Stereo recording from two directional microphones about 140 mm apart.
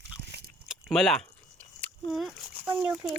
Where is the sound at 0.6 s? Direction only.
Centre (ahead or behind).